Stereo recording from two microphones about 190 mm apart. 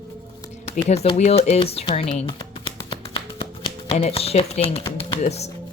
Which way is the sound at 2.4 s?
25° left (ahead or behind).